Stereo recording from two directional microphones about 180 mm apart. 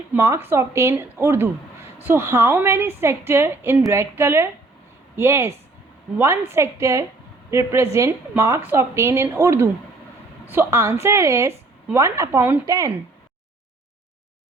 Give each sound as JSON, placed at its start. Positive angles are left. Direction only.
{"t": 0.2, "sound": "a woman's voice", "side_deg": -10}